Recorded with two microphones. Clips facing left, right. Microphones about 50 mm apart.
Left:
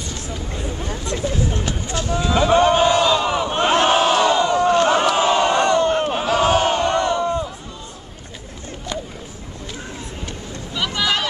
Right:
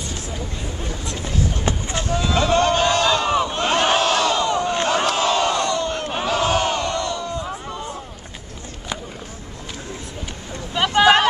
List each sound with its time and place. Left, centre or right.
1.6 s vehicle: right
2.1 s a sound: centre
3.7 s crowd: centre
6.1 s battle cry: centre
6.9 s crowd: left
10.7 s a sound: right